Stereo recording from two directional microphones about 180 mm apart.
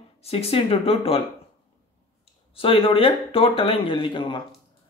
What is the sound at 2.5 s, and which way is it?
Speech, 30° left (ahead or behind).